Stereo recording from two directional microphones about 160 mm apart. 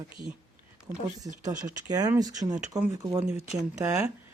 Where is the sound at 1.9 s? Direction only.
25° right (ahead or behind).